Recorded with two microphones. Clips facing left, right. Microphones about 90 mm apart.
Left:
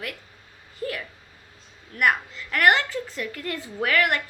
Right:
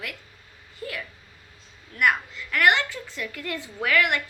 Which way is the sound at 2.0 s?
40° left (ahead or behind).